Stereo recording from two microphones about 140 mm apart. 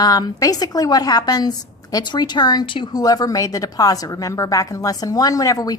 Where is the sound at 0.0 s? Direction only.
30° left (ahead or behind).